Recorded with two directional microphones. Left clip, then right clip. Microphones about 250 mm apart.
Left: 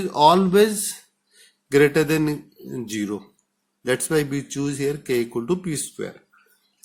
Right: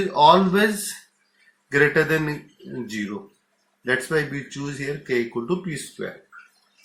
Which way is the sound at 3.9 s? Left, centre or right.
Left.